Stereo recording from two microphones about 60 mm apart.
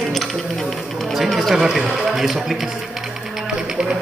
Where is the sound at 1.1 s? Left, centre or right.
Centre.